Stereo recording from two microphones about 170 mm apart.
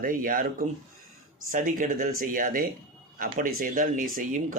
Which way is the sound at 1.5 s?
50° right (ahead or behind).